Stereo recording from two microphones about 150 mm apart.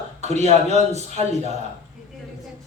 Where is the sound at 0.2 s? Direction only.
45° right (ahead or behind).